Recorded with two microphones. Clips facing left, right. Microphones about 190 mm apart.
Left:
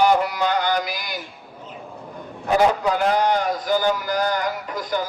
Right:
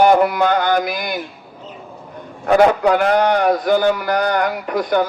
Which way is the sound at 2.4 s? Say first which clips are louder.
Right 6 dB; 65° right (ahead or behind).